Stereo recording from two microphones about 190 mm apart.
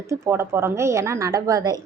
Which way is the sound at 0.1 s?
15° right (ahead or behind).